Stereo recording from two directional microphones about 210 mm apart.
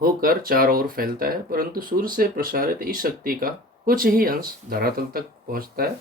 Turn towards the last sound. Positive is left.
turn(degrees=-45)  # may be behind; listen again after turning